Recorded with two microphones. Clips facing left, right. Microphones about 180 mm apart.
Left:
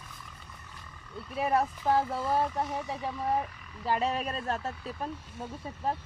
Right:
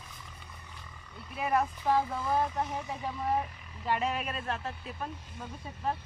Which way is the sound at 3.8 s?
30° left (ahead or behind).